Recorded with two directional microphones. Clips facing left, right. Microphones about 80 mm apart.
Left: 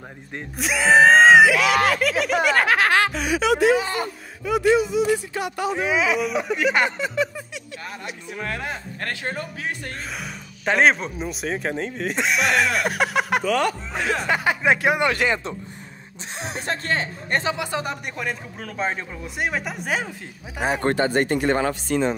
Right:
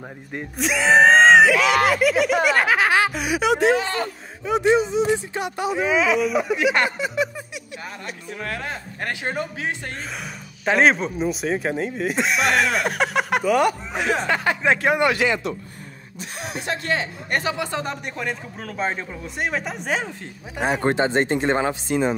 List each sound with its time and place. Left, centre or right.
0.6 s speech: centre
3.4 s speech: right
3.7 s speech: centre
4.5 s speech: right
5.8 s speech: centre
7.0 s a sound: centre
9.0 s speech: centre
10.1 s speech: centre
13.4 s speech: centre
14.2 s speech: centre
15.1 s speech: left
17.6 s speech: centre
20.8 s speech: right